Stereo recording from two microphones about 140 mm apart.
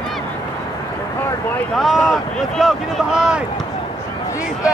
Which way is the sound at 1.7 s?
Centre (ahead or behind).